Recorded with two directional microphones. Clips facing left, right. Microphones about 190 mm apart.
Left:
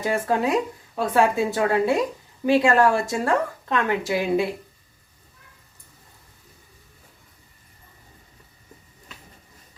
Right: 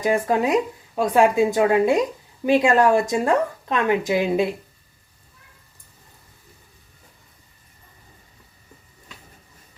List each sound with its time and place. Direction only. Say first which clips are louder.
0.0 s speech: right 3 dB; 15° right (ahead or behind)